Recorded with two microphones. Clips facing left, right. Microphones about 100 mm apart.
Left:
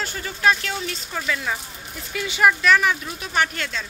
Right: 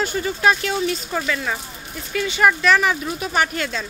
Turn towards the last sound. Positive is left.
turn(degrees=-10)  # may be behind; listen again after turning